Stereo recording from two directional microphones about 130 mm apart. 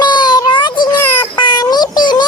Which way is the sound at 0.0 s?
35° left (ahead or behind).